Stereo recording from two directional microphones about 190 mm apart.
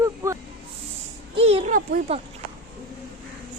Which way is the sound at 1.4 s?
35° right (ahead or behind).